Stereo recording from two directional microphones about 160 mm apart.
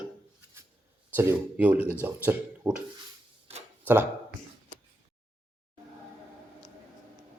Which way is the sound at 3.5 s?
40° right (ahead or behind).